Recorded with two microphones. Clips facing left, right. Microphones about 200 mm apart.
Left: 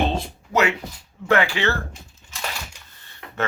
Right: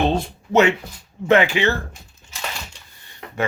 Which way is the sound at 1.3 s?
20° right (ahead or behind).